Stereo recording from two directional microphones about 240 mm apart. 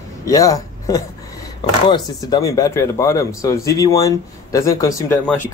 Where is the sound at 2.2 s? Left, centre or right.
Centre.